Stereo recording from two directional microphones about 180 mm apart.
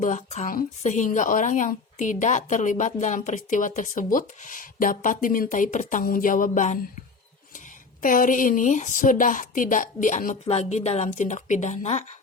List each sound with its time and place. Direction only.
0.0 s a woman's voice: 40° left (ahead or behind)
8.0 s a woman's voice: 50° left (ahead or behind)